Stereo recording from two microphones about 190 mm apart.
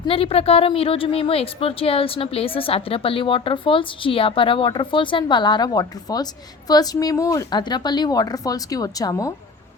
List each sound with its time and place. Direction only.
0.0 s a woman's voice: 30° left (ahead or behind)